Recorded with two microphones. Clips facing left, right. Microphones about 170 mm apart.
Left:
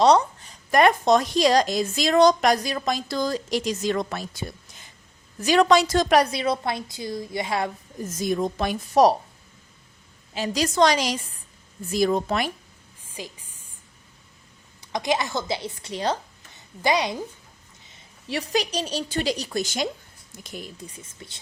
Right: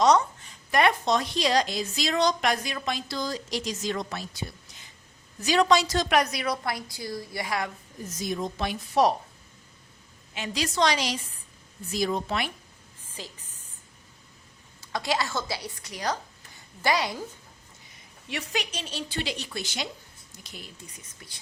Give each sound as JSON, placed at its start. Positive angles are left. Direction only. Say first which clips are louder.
{"t": 0.0, "sound": "a woman's voice", "louder": "left 3 dB", "side_deg": 30}
{"t": 0.7, "sound": "a woman's voice", "louder": "left 5 dB", "side_deg": 45}
{"t": 6.1, "sound": "a woman's voice", "louder": "left 3 dB", "side_deg": 30}
{"t": 8.2, "sound": "a woman's voice", "louder": "left 6 dB", "side_deg": 55}
{"t": 10.3, "sound": "a woman's voice", "louder": "left 6 dB", "side_deg": 40}
{"t": 13.1, "sound": "a sound", "louder": "left 4 dB", "side_deg": 10}
{"t": 14.8, "sound": "a woman's voice", "louder": "left 4 dB", "side_deg": 20}
{"t": 17.8, "sound": "a woman's voice", "louder": "left 6 dB", "side_deg": 30}
{"t": 20.8, "sound": "a woman's voice", "louder": "left 7 dB", "side_deg": 30}